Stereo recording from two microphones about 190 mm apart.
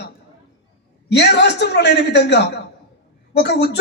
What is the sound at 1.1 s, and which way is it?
A man's voice, 65° left (ahead or behind).